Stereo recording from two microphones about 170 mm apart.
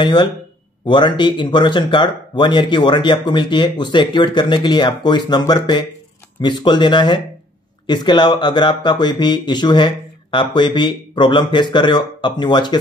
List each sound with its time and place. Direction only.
0.0 s speech: 25° left (ahead or behind)